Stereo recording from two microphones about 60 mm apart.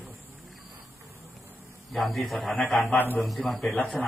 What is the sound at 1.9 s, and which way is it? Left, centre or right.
A man's voice, centre.